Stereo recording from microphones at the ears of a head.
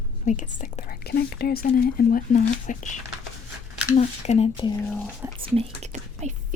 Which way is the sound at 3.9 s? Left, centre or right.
Left.